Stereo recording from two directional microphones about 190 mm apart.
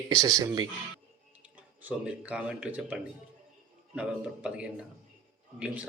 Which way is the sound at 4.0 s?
5° right (ahead or behind).